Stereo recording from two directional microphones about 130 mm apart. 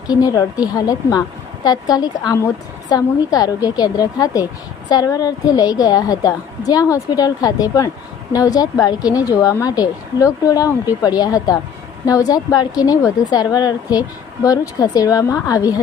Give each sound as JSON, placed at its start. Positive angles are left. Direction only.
{"t": 0.1, "sound": "a woman's voice", "side_deg": 30}